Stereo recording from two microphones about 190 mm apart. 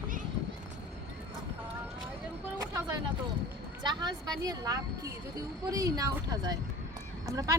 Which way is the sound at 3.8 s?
20° right (ahead or behind).